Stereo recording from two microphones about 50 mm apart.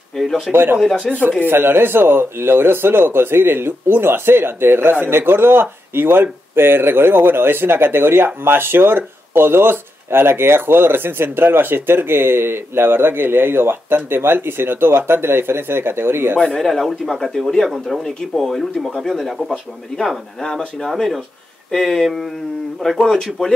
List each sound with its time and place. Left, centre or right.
0.5 s speech: right
0.7 s speech: centre
1.5 s speech: right
16.3 s speech: centre
16.6 s speech: centre
20.9 s speech: centre